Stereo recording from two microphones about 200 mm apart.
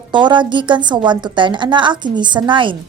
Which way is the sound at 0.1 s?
25° right (ahead or behind).